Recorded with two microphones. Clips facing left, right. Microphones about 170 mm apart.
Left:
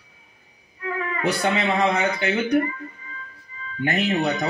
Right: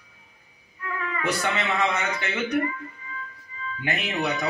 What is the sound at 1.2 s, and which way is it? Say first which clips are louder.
Speech: left 4 dB; 35° left (ahead or behind).